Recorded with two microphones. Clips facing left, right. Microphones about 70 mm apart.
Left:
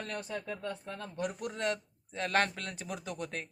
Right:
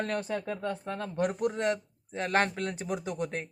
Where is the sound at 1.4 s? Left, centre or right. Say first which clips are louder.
Right 6 dB; right.